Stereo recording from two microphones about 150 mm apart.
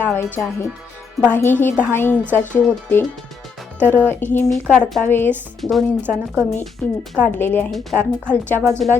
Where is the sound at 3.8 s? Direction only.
10° left (ahead or behind).